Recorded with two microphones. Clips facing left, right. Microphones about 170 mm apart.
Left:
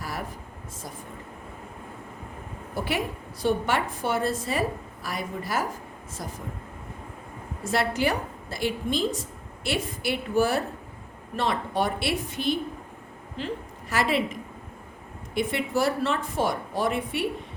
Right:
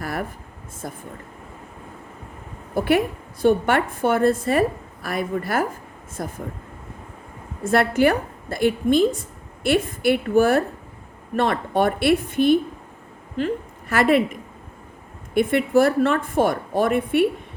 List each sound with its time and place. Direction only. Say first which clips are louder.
0.0 s air conditioning: right 6 dB; 55° right (ahead or behind)
2.7 s a woman's voice: right 9 dB; 55° right (ahead or behind)
7.6 s a woman's voice: right 7 dB; 55° right (ahead or behind)
15.4 s a woman's voice: right 8 dB; 55° right (ahead or behind)